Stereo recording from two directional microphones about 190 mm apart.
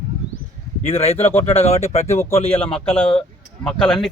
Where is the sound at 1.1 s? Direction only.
10° left (ahead or behind).